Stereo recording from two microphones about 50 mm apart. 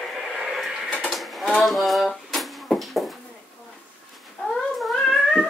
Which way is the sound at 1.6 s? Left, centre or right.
Centre.